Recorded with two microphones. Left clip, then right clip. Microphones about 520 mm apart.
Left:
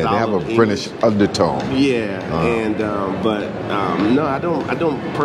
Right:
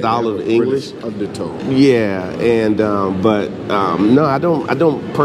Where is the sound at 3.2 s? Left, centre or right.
Right.